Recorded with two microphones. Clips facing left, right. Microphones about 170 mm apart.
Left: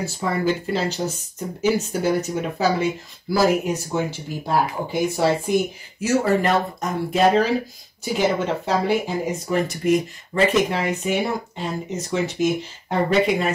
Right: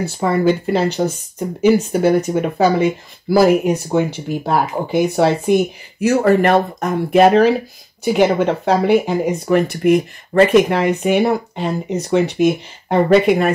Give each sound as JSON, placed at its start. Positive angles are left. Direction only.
{"t": 0.0, "sound": "speech", "side_deg": -60}